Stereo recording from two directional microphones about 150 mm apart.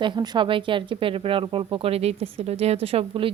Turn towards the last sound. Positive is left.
turn(degrees=-35)  # may be behind; listen again after turning